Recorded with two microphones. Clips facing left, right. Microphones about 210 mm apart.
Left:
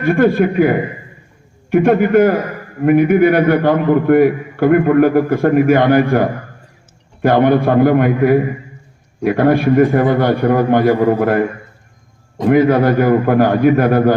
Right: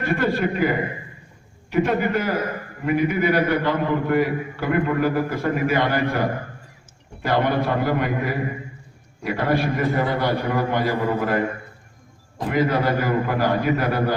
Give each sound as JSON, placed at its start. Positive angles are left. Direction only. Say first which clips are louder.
{"t": 0.0, "sound": "a man's voice", "louder": "left 9 dB", "side_deg": 50}
{"t": 12.5, "sound": "a man's voice", "louder": "left 10 dB", "side_deg": 50}